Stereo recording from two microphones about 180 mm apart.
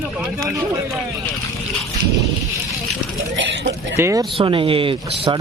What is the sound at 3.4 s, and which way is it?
Speech, 85° right.